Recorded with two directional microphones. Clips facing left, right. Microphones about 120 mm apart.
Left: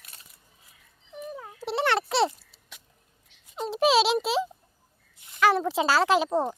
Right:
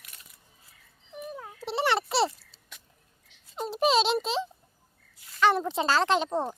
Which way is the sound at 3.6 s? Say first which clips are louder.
Left 2 dB; centre (ahead or behind).